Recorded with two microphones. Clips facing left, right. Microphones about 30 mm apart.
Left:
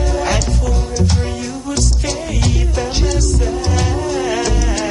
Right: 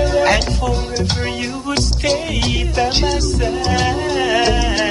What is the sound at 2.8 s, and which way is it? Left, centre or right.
Music, right.